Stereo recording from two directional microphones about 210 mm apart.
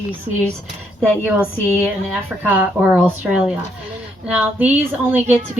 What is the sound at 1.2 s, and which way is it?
A woman's voice, 10° right (ahead or behind).